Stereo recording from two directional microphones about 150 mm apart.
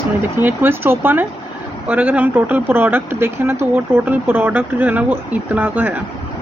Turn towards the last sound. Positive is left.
turn(degrees=-10)  # may be behind; listen again after turning